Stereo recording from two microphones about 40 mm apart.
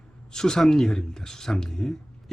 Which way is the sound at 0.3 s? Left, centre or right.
Centre.